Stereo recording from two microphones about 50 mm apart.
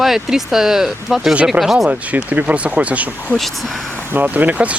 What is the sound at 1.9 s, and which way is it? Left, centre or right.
Speech, right.